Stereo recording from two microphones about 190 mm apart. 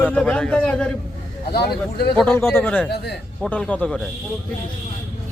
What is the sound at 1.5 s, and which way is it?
Speech, 55° left (ahead or behind).